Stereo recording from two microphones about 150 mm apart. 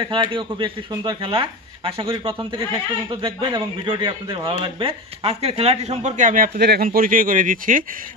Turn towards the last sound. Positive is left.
turn(degrees=-60)  # may be behind; listen again after turning